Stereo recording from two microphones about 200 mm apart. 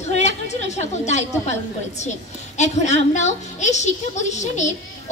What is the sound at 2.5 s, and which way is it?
A woman's voice, 35° left (ahead or behind).